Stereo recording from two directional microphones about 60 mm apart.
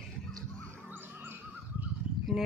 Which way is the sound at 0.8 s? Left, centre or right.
Right.